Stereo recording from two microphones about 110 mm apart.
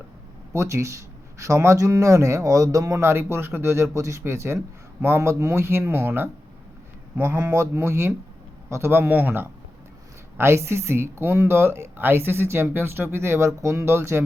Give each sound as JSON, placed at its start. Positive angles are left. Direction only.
{"t": 0.5, "sound": "speech", "side_deg": -25}